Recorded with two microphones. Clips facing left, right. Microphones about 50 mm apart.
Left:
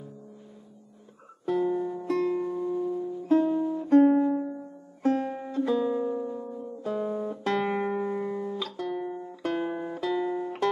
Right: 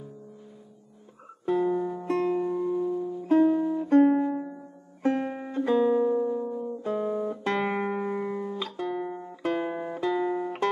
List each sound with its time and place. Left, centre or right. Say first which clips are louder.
1.4 s music: right 1 dB; right
2.0 s music: right 1 dB; right
4.3 s music: left 3 dB; centre
5.0 s music: even; right
8.2 s music: even; centre
9.4 s music: right 1 dB; centre